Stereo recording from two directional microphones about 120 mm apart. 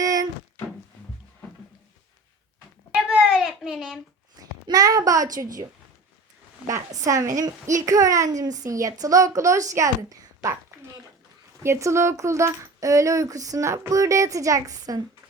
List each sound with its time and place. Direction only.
0.0 s a sound: 30° right (ahead or behind)
2.9 s babbling: 5° right (ahead or behind)
4.4 s a child's voice: 30° right (ahead or behind)
7.0 s a woman's voice: 25° right (ahead or behind)
11.6 s a woman's voice: 25° right (ahead or behind)